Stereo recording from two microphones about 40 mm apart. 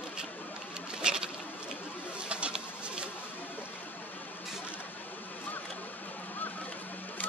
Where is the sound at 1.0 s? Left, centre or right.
Centre.